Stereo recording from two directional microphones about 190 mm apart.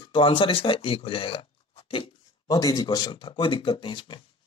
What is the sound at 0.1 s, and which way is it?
Speech, 25° left (ahead or behind).